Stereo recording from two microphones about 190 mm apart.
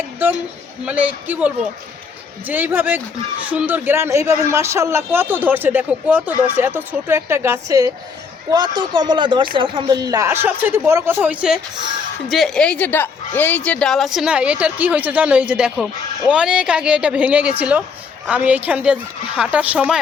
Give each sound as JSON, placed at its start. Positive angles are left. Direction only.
{"t": 0.9, "sound": "speech", "side_deg": -10}